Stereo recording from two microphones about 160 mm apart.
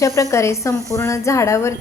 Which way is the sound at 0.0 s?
20° left (ahead or behind).